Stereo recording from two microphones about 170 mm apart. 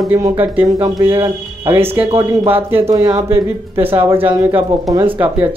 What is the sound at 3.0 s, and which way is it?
Speech, 35° right (ahead or behind).